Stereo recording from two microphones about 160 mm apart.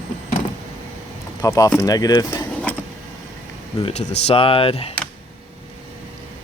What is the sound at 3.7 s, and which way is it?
Speech, 40° left (ahead or behind).